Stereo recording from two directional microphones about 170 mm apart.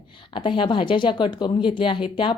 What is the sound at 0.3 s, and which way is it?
A woman's voice, 30° left (ahead or behind).